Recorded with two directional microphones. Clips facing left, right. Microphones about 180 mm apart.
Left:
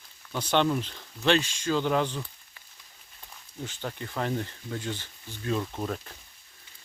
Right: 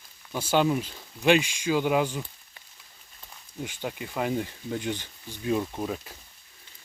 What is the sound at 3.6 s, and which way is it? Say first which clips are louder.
Speech: right 2 dB; 15° right (ahead or behind).